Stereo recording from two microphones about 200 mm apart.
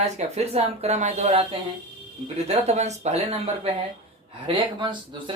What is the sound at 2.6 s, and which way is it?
Speech, 35° right (ahead or behind).